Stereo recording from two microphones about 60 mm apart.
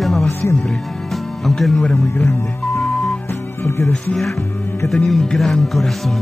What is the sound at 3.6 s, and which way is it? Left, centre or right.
Music, left.